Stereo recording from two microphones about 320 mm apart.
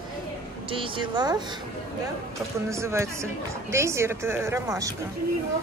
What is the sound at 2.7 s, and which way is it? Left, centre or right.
A woman's voice, centre.